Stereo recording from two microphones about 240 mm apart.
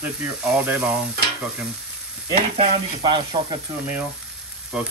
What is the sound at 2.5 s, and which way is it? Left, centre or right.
Speech, right.